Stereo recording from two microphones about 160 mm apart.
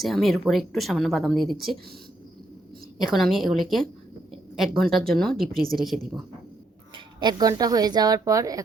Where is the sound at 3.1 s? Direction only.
Centre (ahead or behind).